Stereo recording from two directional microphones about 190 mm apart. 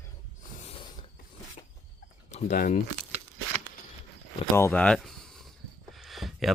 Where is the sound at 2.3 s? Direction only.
45° left (ahead or behind).